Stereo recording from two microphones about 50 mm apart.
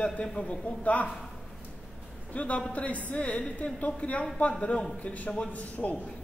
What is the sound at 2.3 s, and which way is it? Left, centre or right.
Speech, left.